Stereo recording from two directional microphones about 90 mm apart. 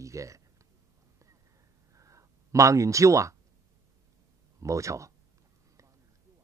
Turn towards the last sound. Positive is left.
turn(degrees=-35)  # may be behind; listen again after turning